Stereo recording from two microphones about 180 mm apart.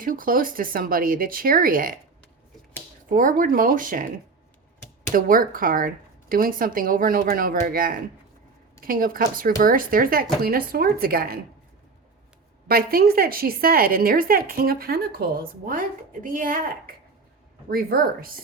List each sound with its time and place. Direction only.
0.0 s a woman's voice: 50° right (ahead or behind)
3.1 s a woman's voice: 50° right (ahead or behind)
5.1 s a woman's voice: 50° right (ahead or behind)
12.6 s a woman's voice: 55° right (ahead or behind)